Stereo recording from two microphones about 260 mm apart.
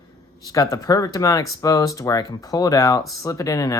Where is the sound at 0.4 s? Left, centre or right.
Centre.